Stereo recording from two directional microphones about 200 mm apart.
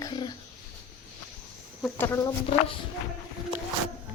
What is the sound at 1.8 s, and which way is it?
Speech, 10° left (ahead or behind).